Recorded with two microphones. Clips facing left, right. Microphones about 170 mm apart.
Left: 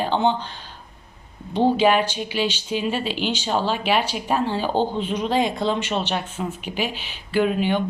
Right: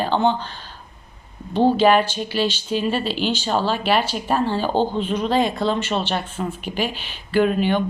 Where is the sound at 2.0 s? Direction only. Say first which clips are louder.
Right 2 dB; 10° left (ahead or behind).